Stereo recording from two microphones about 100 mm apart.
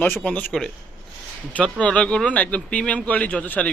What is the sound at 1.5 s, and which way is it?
Speech, 10° left (ahead or behind).